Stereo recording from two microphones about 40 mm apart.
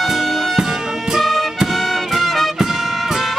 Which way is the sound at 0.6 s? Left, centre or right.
Centre.